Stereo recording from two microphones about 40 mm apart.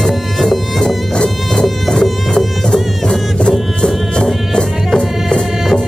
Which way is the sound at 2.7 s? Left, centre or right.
Centre.